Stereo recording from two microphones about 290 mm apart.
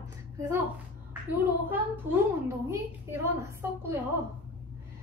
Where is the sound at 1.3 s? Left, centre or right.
Centre.